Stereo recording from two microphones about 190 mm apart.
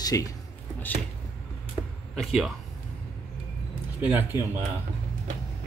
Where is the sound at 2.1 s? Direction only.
Centre (ahead or behind).